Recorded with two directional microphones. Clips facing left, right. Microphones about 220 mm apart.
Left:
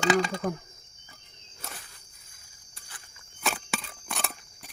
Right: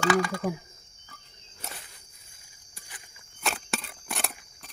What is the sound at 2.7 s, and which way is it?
Cricket, 15° right (ahead or behind).